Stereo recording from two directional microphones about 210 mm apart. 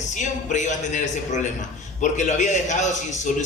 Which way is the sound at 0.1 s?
35° left (ahead or behind).